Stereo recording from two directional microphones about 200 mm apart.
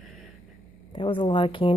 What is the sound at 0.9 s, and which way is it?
Speech, 25° left (ahead or behind).